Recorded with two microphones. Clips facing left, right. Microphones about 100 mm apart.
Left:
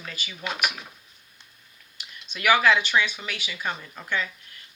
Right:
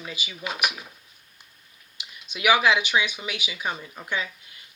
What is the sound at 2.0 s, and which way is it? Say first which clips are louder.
Speech: right 2 dB; 15° right (ahead or behind).